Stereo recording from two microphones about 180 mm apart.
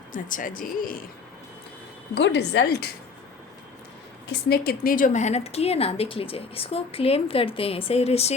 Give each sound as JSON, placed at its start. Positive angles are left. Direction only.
{"t": 0.1, "sound": "speech", "side_deg": 45}
{"t": 2.1, "sound": "a woman's voice", "side_deg": 70}
{"t": 4.3, "sound": "a woman's voice", "side_deg": 60}